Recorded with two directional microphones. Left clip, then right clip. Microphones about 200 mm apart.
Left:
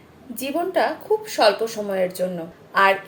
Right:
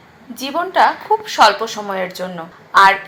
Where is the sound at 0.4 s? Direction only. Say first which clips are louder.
Right 7 dB; 35° right (ahead or behind).